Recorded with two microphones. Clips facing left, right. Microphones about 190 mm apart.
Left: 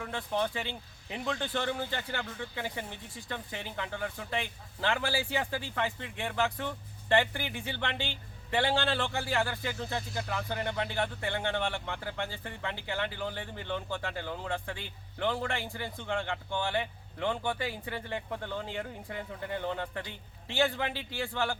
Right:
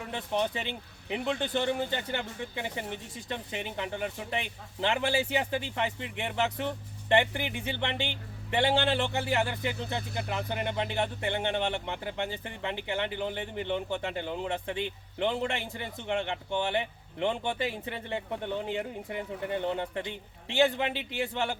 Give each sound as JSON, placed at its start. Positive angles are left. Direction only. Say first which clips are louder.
{"t": 0.1, "sound": "speech", "louder": "right 2 dB", "side_deg": -20}